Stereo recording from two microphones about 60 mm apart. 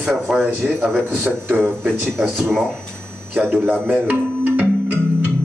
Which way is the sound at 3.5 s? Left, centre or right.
Right.